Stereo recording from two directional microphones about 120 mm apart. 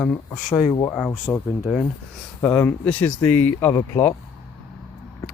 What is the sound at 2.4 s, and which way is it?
Speech, 15° left (ahead or behind).